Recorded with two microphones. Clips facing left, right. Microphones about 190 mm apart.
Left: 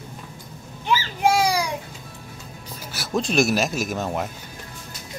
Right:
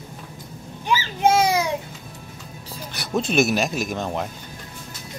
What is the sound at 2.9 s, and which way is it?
Speech, centre (ahead or behind).